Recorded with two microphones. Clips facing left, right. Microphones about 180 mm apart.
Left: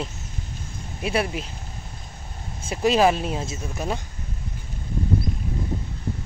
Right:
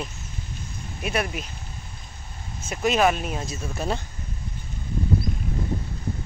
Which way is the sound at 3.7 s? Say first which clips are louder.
Even; 10° left (ahead or behind).